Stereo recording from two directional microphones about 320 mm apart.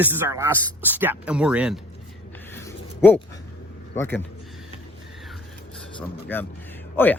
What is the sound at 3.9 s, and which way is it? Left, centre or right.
Speech, centre.